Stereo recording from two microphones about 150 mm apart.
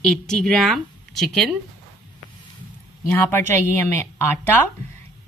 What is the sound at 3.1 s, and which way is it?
A woman's voice, 15° left (ahead or behind).